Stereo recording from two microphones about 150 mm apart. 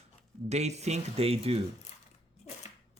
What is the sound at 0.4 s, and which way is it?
Speech, 45° right (ahead or behind).